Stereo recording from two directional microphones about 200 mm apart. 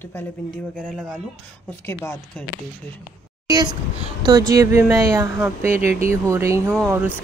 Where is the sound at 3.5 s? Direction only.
15° right (ahead or behind).